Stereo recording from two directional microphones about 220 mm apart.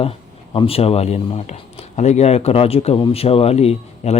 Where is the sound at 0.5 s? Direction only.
25° left (ahead or behind).